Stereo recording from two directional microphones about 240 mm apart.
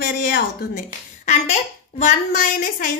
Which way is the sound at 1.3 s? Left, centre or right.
Left.